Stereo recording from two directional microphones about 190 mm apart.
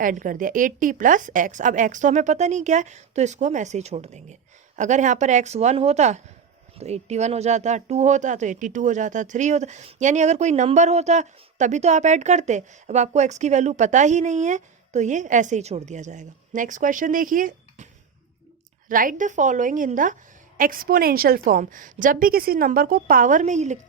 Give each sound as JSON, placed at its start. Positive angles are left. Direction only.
{"t": 0.0, "sound": "speech", "side_deg": -45}
{"t": 18.9, "sound": "a woman's voice", "side_deg": -45}